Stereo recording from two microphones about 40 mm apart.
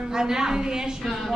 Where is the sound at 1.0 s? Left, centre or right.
Centre.